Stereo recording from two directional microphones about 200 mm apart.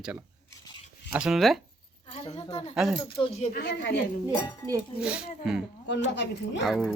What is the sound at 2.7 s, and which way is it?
Speech, centre (ahead or behind).